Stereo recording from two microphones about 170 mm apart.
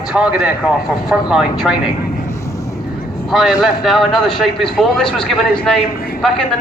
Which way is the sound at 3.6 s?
Centre (ahead or behind).